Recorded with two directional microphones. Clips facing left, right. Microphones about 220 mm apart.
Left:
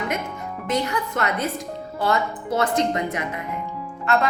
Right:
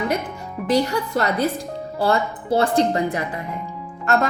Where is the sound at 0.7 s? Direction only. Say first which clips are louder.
Right 5 dB; 30° right (ahead or behind).